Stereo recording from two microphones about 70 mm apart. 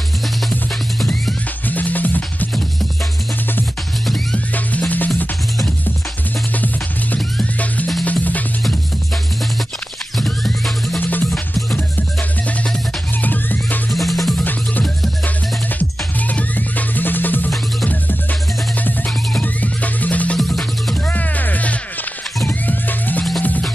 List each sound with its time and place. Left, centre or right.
0.5 s music: centre
1.7 s music: left
4.7 s music: left
7.5 s music: left
10.1 s music: centre
11.0 s music: left
13.2 s music: left
13.9 s music: centre
14.4 s music: left
19.4 s music: left
20.3 s music: centre
21.1 s music: left